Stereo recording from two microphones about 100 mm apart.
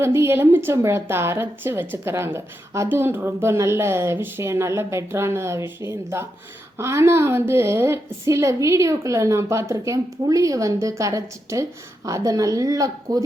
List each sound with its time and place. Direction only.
0.0 s speech: 25° right (ahead or behind)